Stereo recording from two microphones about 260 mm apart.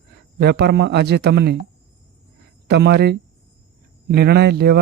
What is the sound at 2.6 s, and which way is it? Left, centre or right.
Speech, right.